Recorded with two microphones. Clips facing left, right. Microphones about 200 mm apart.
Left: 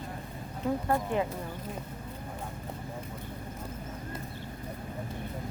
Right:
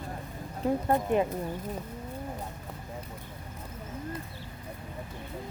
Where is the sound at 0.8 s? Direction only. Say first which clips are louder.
Right 4 dB; 20° right (ahead or behind).